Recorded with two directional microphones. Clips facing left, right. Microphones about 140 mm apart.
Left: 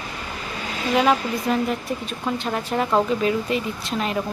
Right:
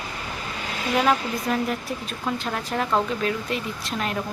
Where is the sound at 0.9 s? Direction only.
Centre (ahead or behind).